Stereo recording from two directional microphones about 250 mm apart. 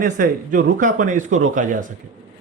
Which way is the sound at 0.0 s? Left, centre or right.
Right.